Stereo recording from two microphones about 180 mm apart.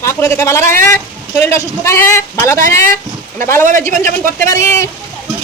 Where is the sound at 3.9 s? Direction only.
45° right (ahead or behind).